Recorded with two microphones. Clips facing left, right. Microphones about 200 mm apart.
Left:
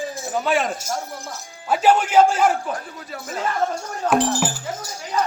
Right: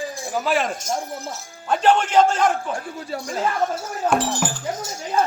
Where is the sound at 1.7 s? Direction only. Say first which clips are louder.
Left 1 dB; 5° left (ahead or behind).